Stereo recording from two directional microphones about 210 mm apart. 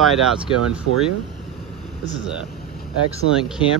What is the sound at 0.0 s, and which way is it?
Speech, centre (ahead or behind).